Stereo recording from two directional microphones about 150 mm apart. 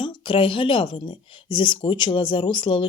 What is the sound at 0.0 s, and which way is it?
Speech, 35° left (ahead or behind).